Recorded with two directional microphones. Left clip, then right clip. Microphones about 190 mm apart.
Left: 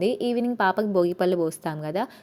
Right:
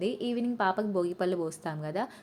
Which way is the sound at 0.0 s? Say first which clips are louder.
Left 8 dB; 30° left (ahead or behind).